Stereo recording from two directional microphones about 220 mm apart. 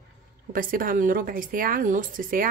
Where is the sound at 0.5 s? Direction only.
40° right (ahead or behind).